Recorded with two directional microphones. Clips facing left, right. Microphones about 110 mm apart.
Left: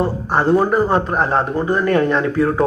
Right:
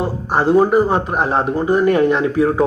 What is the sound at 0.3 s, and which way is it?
A man's voice, 15° right (ahead or behind).